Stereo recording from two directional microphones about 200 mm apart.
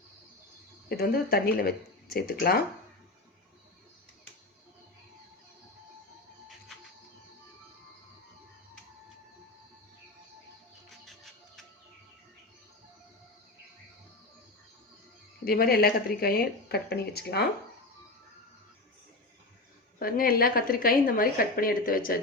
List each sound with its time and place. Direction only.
0.9 s a woman's voice: 50° left (ahead or behind)
10.8 s music: centre (ahead or behind)
15.4 s a woman's voice: 50° left (ahead or behind)
20.0 s a woman's voice: 45° left (ahead or behind)